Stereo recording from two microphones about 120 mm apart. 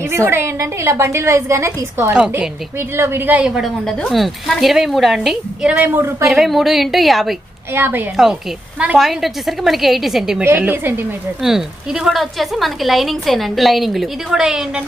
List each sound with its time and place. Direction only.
0.0 s a woman's voice: 20° right (ahead or behind)
2.1 s a woman's voice: 5° right (ahead or behind)
2.8 s a woman's voice: 20° right (ahead or behind)
6.2 s a woman's voice: centre (ahead or behind)
7.7 s a woman's voice: 15° right (ahead or behind)
10.4 s a woman's voice: 15° right (ahead or behind)
11.4 s a woman's voice: 5° right (ahead or behind)